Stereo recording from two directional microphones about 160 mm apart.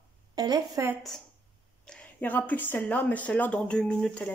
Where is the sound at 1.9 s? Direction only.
10° left (ahead or behind).